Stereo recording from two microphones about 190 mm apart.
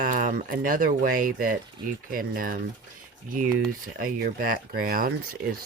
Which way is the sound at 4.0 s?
50° right (ahead or behind).